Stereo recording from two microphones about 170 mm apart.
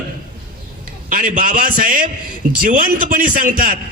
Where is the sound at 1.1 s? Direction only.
55° right (ahead or behind).